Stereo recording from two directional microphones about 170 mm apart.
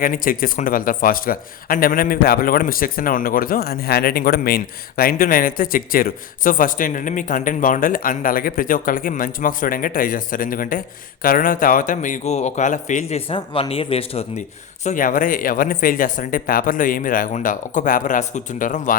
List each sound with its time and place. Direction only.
0.0 s speech: 55° left (ahead or behind); by 14.4 s 35° left (ahead or behind)
14.8 s speech: 50° left (ahead or behind)